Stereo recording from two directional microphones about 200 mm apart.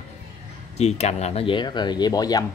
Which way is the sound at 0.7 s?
35° left (ahead or behind).